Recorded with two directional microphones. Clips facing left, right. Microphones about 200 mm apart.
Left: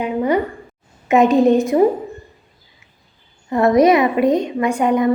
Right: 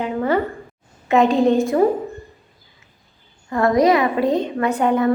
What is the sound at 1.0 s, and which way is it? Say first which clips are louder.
Speech: left 3 dB; 20° left (ahead or behind).